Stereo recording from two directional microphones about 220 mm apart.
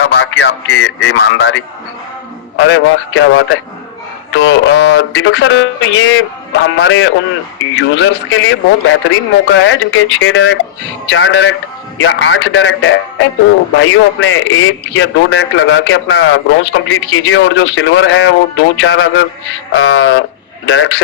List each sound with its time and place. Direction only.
0.0 s radio: 55° left (ahead or behind)
2.6 s a man's voice: 55° left (ahead or behind)